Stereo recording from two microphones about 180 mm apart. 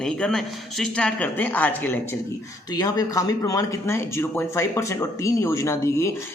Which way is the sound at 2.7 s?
20° left (ahead or behind).